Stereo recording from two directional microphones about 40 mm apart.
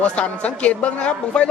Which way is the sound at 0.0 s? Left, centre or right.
Left.